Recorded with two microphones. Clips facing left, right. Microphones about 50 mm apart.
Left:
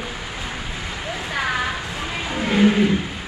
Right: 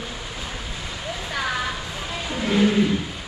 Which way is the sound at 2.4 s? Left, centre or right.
Left.